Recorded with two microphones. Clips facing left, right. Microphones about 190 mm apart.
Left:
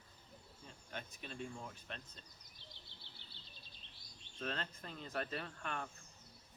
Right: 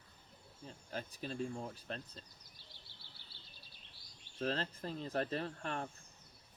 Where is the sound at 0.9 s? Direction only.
35° right (ahead or behind).